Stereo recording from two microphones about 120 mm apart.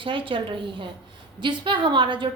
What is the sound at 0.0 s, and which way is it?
A woman's voice, 45° right (ahead or behind).